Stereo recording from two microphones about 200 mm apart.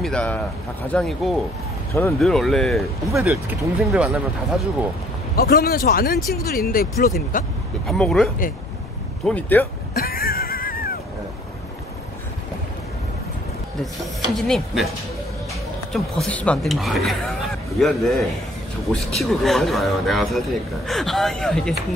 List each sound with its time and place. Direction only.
0.0 s a man's voice: 5° left (ahead or behind)
5.3 s speech: 50° left (ahead or behind)
7.8 s a man's voice: centre (ahead or behind)
9.9 s music: 50° left (ahead or behind)
14.3 s a man's voice: centre (ahead or behind)
15.9 s a man's voice: 5° left (ahead or behind)